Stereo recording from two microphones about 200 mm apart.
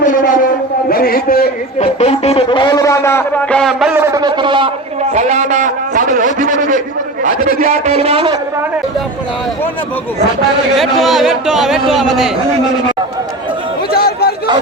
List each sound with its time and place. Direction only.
0.0 s a man's voice: 40° left (ahead or behind)
1.8 s a sound: 30° left (ahead or behind); by 4.7 s 25° right (ahead or behind)
5.1 s a sound: 35° right (ahead or behind)
7.6 s a man's voice: 35° right (ahead or behind)
10.8 s a man's voice: centre (ahead or behind)
13.9 s chatter: 50° left (ahead or behind)